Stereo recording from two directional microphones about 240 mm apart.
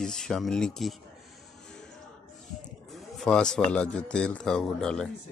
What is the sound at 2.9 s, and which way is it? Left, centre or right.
Speech, centre.